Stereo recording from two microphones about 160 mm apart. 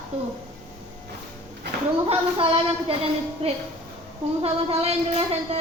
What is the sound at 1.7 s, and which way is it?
Speech, 85° right.